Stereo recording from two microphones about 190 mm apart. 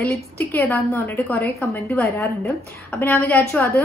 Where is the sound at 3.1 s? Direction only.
5° left (ahead or behind).